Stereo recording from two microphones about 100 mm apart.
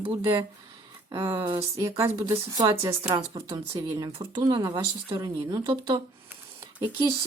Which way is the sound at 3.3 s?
60° right (ahead or behind).